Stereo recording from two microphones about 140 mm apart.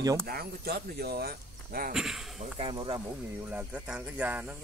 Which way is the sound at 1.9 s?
5° right (ahead or behind).